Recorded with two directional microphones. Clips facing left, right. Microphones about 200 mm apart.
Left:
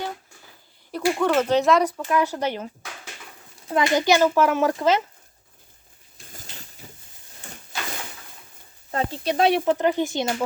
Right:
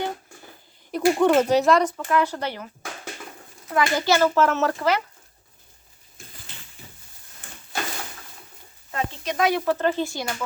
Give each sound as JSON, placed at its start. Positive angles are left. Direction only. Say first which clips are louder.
{"t": 0.9, "sound": "speech", "louder": "right 3 dB", "side_deg": -15}
{"t": 2.0, "sound": "a child's voice", "louder": "left 1 dB", "side_deg": 15}
{"t": 3.7, "sound": "a child's voice", "louder": "left 2 dB", "side_deg": 20}
{"t": 6.3, "sound": "a sound", "louder": "left 7 dB", "side_deg": 40}
{"t": 7.7, "sound": "a sound", "louder": "right 3 dB", "side_deg": -55}
{"t": 8.9, "sound": "speech", "louder": "left 4 dB", "side_deg": 35}
{"t": 9.6, "sound": "a child's voice", "louder": "left 2 dB", "side_deg": 15}